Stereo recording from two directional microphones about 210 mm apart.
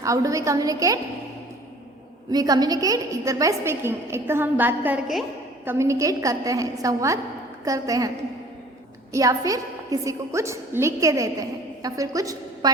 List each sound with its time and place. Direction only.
0.0 s a woman's voice: 15° right (ahead or behind)
2.3 s a woman's voice: 20° right (ahead or behind)
9.1 s a woman's voice: 15° right (ahead or behind)